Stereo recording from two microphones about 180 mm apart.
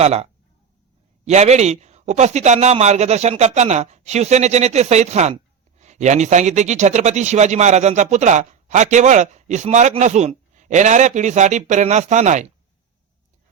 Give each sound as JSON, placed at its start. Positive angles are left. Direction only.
{"t": 0.0, "sound": "a man's voice", "side_deg": -35}